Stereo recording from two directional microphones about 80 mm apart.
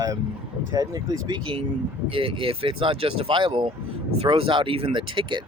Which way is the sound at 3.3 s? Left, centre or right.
Right.